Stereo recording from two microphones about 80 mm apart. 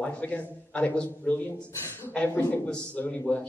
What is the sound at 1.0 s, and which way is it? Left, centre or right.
Speech, left.